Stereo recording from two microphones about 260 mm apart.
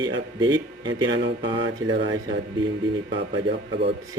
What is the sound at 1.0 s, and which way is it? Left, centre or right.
Speech, right.